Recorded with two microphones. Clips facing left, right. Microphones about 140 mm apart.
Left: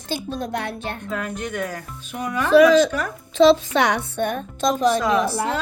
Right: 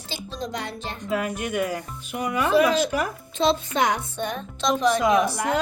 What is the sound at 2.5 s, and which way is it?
A woman's voice, 90° left.